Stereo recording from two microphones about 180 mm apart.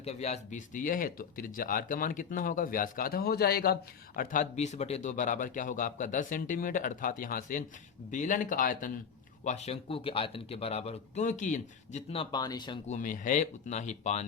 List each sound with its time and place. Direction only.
0.0 s speech: 35° left (ahead or behind)
9.4 s speech: 40° left (ahead or behind)
12.9 s speech: 45° left (ahead or behind)